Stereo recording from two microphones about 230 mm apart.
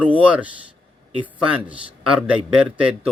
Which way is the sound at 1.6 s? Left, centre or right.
Centre.